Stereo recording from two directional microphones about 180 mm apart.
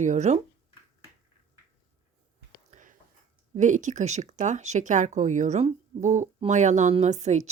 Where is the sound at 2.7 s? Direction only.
45° right (ahead or behind).